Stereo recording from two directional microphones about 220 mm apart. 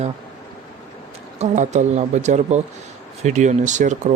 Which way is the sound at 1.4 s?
30° right (ahead or behind).